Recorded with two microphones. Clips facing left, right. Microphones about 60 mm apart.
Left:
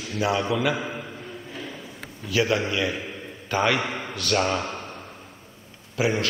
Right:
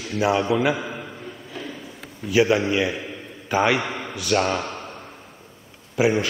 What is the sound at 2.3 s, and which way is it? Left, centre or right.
Speech, centre.